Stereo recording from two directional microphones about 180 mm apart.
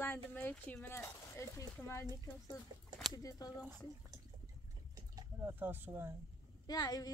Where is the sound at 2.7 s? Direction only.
25° right (ahead or behind).